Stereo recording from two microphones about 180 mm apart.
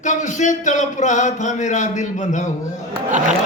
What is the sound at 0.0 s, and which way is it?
Speech, 45° left (ahead or behind).